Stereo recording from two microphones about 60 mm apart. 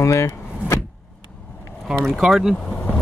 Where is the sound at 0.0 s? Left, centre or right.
Left.